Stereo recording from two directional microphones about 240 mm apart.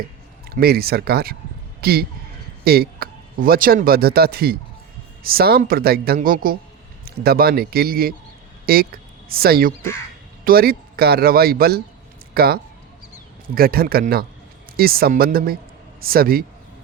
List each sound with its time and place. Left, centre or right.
0.5 s speech: right
13.6 s a man's voice: right